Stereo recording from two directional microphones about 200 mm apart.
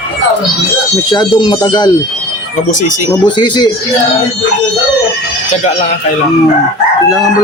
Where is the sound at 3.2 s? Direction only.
20° left (ahead or behind).